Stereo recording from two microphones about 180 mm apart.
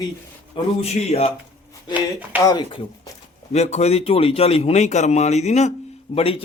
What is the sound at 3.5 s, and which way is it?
A man's voice, 40° left (ahead or behind).